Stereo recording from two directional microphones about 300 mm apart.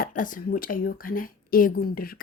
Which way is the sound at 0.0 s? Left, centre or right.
Left.